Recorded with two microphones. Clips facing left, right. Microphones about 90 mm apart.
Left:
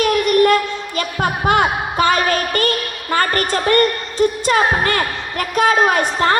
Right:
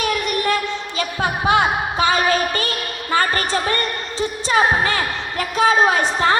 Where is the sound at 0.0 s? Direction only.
50° left (ahead or behind).